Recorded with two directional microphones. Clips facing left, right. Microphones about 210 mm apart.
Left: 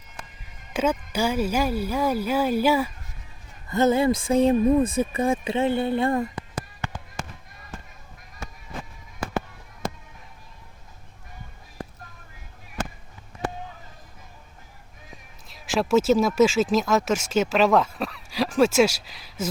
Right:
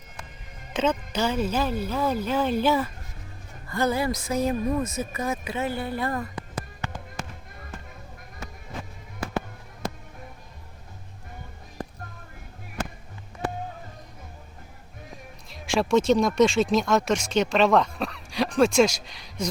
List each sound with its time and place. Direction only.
0.7 s speech: 10° left (ahead or behind)
3.7 s speech: 25° left (ahead or behind)
15.4 s speech: centre (ahead or behind)